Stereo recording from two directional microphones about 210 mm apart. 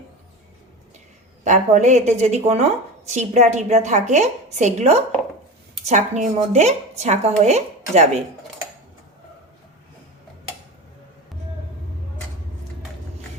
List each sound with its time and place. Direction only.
1.5 s speech: 35° right (ahead or behind)